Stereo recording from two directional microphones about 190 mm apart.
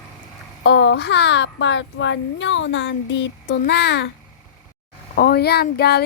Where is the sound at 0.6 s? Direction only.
75° left (ahead or behind).